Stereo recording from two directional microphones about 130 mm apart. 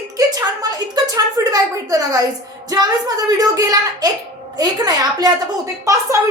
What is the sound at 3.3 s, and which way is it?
A woman's voice, 30° right (ahead or behind).